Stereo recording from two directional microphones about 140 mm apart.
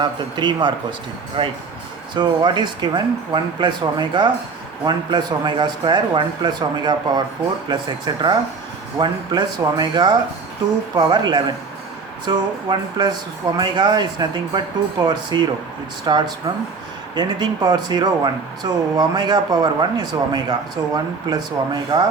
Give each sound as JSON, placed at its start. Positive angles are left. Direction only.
{"t": 0.0, "sound": "speech", "side_deg": -30}